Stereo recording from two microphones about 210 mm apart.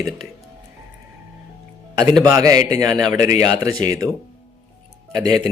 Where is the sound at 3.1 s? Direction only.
35° left (ahead or behind).